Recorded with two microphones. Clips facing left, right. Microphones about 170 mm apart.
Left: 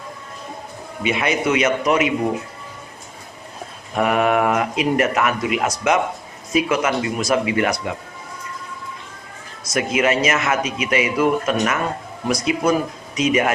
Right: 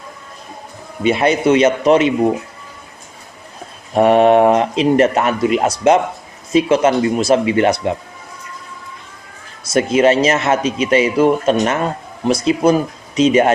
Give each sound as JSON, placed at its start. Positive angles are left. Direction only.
{"t": 1.0, "sound": "speech", "side_deg": -35}
{"t": 3.9, "sound": "speech", "side_deg": -30}
{"t": 9.6, "sound": "speech", "side_deg": -30}